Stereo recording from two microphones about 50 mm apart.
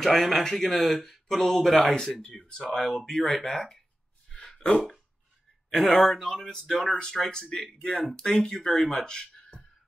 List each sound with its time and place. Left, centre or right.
0.0 s speech: centre
4.3 s a sound: centre
5.7 s speech: centre